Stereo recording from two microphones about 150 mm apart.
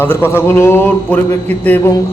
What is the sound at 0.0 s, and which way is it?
A man's voice, 15° left (ahead or behind).